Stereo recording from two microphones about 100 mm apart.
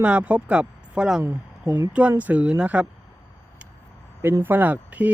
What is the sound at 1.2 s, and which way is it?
Speech, 20° right (ahead or behind).